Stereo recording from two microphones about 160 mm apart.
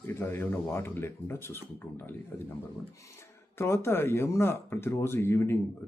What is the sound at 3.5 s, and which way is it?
Speech, 15° left (ahead or behind).